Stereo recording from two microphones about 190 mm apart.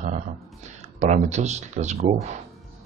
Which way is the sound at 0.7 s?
35° right (ahead or behind).